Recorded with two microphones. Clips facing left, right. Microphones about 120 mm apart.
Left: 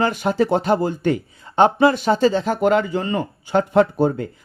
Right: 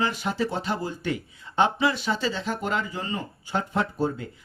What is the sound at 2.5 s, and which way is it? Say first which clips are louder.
Speech: left 11 dB; 65° left (ahead or behind).